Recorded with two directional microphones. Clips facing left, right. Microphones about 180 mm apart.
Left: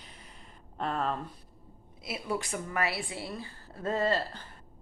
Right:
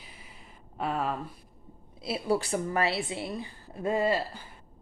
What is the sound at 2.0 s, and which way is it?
A woman's voice, 30° right (ahead or behind).